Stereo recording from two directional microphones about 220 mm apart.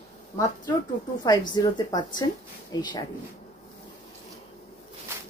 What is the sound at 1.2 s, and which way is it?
A woman's voice, 20° left (ahead or behind).